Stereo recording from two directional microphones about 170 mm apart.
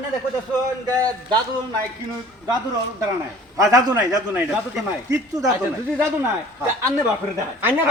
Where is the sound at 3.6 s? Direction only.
20° right (ahead or behind).